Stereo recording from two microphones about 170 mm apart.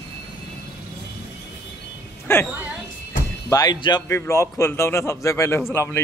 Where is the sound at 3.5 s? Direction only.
25° left (ahead or behind).